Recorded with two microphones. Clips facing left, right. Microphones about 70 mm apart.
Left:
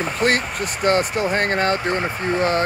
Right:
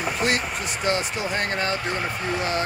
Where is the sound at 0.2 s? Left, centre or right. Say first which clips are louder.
Left 6 dB; left.